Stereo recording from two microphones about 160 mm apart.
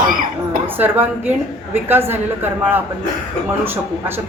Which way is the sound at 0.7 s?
10° right (ahead or behind).